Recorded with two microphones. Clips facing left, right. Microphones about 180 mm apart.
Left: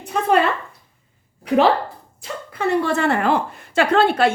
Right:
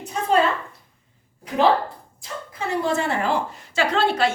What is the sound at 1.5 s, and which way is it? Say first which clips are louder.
A woman's voice: left 3 dB; 70° left (ahead or behind).